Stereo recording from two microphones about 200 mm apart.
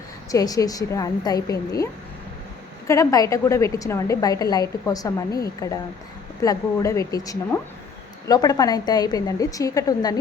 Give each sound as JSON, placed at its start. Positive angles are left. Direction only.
{"t": 0.3, "sound": "a woman's voice", "side_deg": 20}